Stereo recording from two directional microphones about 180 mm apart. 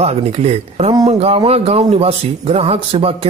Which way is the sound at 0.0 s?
35° right (ahead or behind).